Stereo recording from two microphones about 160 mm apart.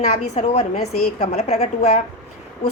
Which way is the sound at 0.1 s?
45° left (ahead or behind).